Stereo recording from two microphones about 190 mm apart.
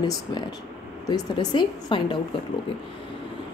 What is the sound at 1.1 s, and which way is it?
Speech, 20° left (ahead or behind).